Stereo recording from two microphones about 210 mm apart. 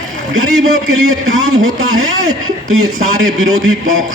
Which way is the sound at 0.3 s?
80° right.